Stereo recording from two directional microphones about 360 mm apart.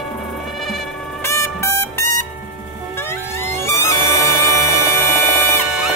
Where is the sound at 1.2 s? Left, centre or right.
Centre.